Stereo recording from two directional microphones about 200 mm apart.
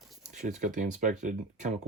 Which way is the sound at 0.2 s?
40° right (ahead or behind).